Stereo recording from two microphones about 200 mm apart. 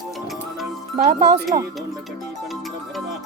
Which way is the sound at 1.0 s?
35° right (ahead or behind).